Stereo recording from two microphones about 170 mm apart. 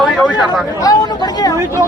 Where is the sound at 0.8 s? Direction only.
25° left (ahead or behind).